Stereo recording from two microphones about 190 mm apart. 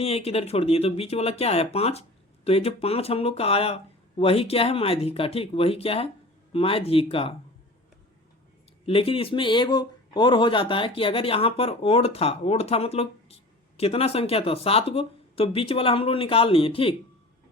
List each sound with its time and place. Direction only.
0.0 s speech: 35° left (ahead or behind)
8.9 s speech: 30° left (ahead or behind)